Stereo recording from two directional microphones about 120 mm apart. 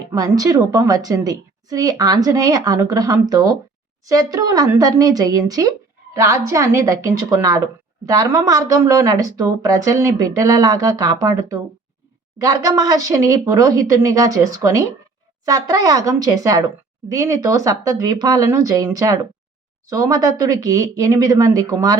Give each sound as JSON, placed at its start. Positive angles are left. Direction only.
{"t": 0.1, "sound": "a woman's voice", "side_deg": -30}